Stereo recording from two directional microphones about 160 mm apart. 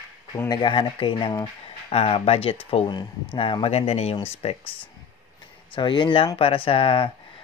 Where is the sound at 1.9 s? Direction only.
40° left (ahead or behind).